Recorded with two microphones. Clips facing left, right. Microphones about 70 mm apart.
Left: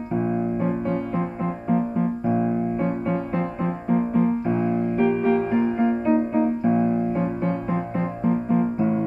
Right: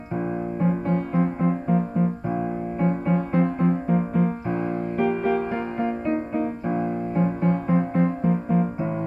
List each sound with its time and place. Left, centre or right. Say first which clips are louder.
0.7 s music: even; centre
3.6 s music: right 1 dB; centre
8.3 s music: left 1 dB; centre